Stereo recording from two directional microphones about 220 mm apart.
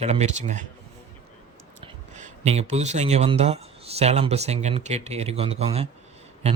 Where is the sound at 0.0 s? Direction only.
30° right (ahead or behind).